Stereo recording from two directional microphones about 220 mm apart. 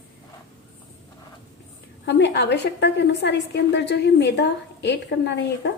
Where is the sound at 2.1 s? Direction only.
50° left (ahead or behind).